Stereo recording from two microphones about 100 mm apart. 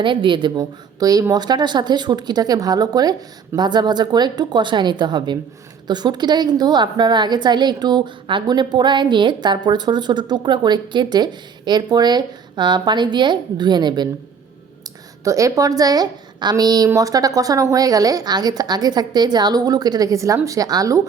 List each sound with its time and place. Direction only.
0.0 s a woman's voice: 55° right (ahead or behind)
15.2 s a woman's voice: 30° right (ahead or behind)